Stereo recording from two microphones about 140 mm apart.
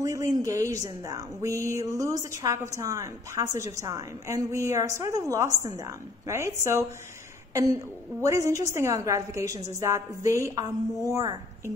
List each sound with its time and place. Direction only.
0.0 s speech: 20° right (ahead or behind)
8.2 s speech: 20° right (ahead or behind)